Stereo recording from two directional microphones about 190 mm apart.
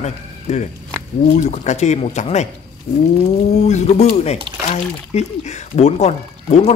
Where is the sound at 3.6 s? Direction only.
35° left (ahead or behind).